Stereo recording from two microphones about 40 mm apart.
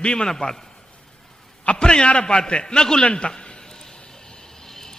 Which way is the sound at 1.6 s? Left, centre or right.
Left.